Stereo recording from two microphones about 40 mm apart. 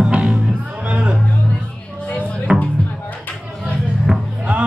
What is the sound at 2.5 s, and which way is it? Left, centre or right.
Music, right.